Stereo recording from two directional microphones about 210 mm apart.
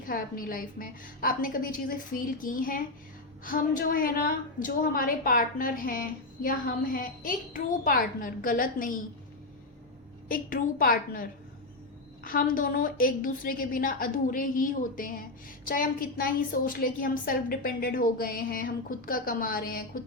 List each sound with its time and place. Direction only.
0.0 s a woman's voice: 40° left (ahead or behind)
10.2 s a woman's voice: 40° left (ahead or behind)